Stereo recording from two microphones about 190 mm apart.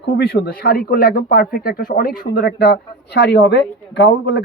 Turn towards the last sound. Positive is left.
turn(degrees=65)  # may be behind; listen again after turning